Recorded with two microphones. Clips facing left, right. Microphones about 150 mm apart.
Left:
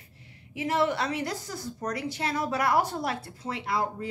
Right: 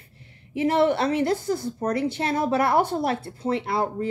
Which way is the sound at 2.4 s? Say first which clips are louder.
Right 4 dB; 25° right (ahead or behind).